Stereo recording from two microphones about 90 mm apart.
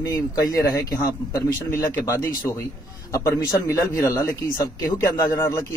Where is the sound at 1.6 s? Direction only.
25° left (ahead or behind).